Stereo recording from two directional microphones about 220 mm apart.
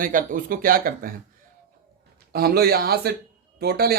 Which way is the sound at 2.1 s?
45° right (ahead or behind).